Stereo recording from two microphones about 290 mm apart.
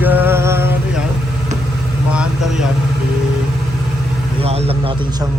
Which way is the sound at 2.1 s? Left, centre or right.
Centre.